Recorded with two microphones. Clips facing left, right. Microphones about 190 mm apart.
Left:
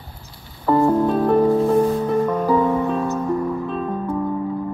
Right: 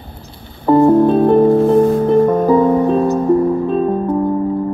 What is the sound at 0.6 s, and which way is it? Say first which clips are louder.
Music: right 7 dB; 20° right (ahead or behind).